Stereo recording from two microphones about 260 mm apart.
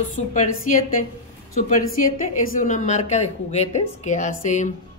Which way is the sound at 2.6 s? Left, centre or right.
Left.